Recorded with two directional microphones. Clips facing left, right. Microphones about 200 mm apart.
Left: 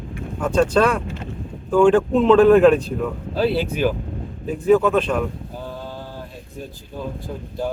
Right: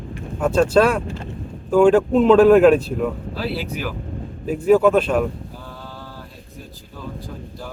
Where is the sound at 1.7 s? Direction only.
5° right (ahead or behind).